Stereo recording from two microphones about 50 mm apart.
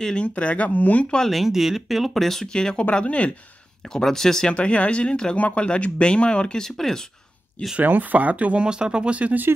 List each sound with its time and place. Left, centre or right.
0.0 s speech: left
1.3 s speech: centre
2.5 s speech: centre
3.9 s speech: centre
4.5 s speech: left
6.6 s speech: centre
7.8 s speech: right
8.6 s speech: centre